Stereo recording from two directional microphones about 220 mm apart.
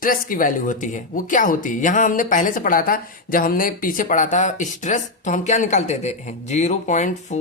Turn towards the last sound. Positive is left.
turn(degrees=35)  # may be behind; listen again after turning